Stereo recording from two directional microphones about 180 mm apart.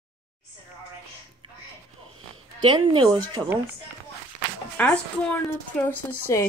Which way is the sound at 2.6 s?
30° right (ahead or behind).